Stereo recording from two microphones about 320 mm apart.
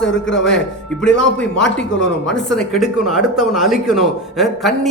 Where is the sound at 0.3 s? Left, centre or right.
Centre.